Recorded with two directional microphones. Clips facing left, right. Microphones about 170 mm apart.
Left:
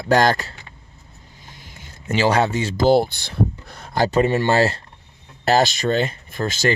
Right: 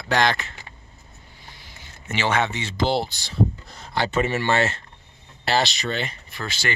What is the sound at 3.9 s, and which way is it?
Speech, 40° left (ahead or behind).